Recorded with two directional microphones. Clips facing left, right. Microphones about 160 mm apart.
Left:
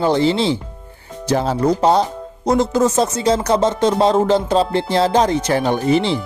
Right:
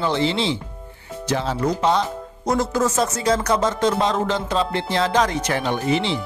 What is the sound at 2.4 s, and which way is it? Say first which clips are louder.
Speech: left 5 dB; 25° left (ahead or behind).